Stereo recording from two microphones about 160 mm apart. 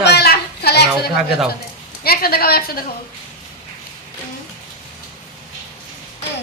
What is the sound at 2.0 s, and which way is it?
Speech, 70° left (ahead or behind).